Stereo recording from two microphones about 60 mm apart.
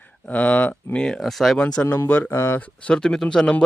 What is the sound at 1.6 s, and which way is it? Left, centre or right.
Speech, centre.